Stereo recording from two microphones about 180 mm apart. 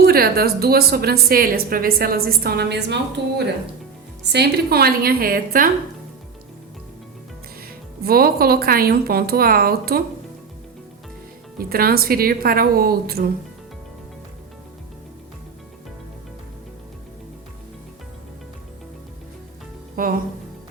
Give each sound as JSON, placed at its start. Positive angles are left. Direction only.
{"t": 0.0, "sound": "a woman's voice", "side_deg": -60}
{"t": 7.7, "sound": "a woman's voice", "side_deg": -55}
{"t": 11.5, "sound": "a woman's voice", "side_deg": -55}
{"t": 20.0, "sound": "speech", "side_deg": -55}